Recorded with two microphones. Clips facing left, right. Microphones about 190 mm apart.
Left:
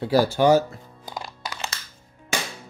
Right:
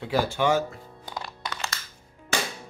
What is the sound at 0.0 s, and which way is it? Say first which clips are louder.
Speech: left 6 dB; 35° left (ahead or behind).